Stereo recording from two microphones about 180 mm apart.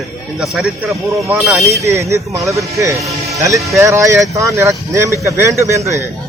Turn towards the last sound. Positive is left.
turn(degrees=-15)  # may be behind; listen again after turning